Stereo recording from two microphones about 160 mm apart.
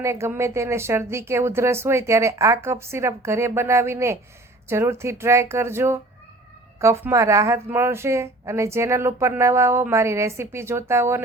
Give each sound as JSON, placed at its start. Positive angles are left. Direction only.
{"t": 0.0, "sound": "speech", "side_deg": -15}